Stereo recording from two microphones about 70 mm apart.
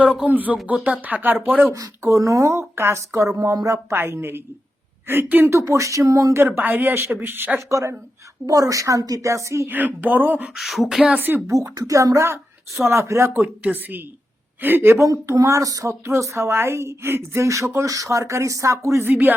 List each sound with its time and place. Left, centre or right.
0.3 s speech: right
1.7 s speech: right
2.6 s speech: right
3.9 s speech: right
5.5 s speech: right
6.6 s speech: right
7.7 s speech: right
9.6 s speech: right
10.5 s a sound: centre
11.1 s speech: right
11.4 s speech: right
13.4 s speech: right
14.9 s speech: right
19.0 s speech: right